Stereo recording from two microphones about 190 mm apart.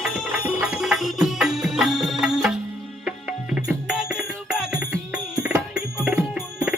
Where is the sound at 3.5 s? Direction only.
5° right (ahead or behind).